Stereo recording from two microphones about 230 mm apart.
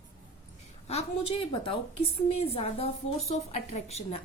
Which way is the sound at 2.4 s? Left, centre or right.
Left.